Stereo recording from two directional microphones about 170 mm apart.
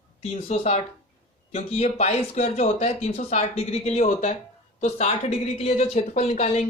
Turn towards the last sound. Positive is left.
turn(degrees=40)  # may be behind; listen again after turning